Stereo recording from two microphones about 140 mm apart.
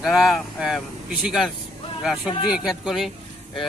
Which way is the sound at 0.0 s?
Centre (ahead or behind).